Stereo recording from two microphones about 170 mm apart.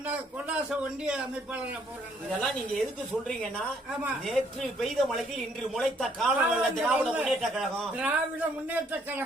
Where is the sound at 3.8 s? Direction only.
Centre (ahead or behind).